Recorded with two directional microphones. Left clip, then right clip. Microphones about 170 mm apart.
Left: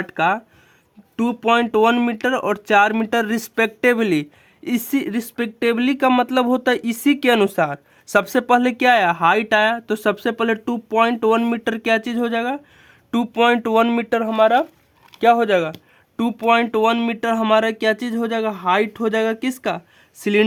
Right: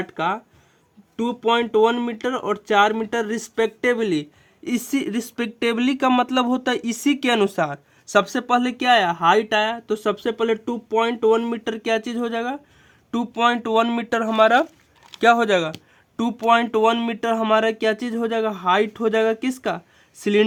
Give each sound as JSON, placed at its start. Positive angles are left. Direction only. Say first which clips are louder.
{"t": 0.1, "sound": "speech", "louder": "left 8 dB", "side_deg": 55}
{"t": 4.6, "sound": "speech", "louder": "left 2 dB", "side_deg": 25}
{"t": 8.2, "sound": "speech", "louder": "left 5 dB", "side_deg": 35}
{"t": 14.3, "sound": "speech", "louder": "even", "side_deg": 0}